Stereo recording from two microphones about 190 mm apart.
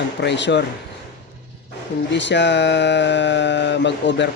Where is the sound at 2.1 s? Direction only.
70° left (ahead or behind).